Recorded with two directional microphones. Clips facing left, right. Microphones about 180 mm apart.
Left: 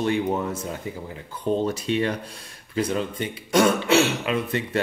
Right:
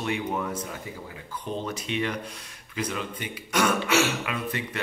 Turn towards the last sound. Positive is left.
turn(degrees=30)  # may be behind; listen again after turning